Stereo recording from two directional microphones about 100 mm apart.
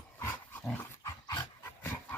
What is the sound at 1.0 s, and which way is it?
Dog, 35° left (ahead or behind).